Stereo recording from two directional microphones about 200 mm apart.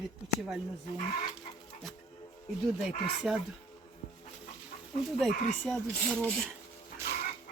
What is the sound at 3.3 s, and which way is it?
Speech, centre (ahead or behind).